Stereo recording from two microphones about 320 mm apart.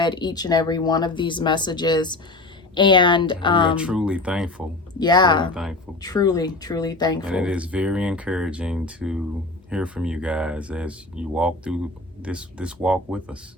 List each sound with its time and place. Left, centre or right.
0.0 s speech: centre
3.8 s speech: centre
4.9 s speech: centre
7.3 s speech: centre